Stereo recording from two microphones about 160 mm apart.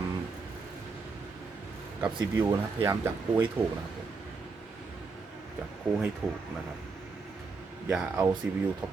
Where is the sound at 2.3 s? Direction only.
15° right (ahead or behind).